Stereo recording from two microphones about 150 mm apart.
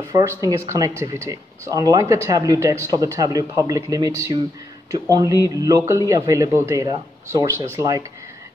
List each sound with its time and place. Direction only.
0.0 s speech: 20° right (ahead or behind)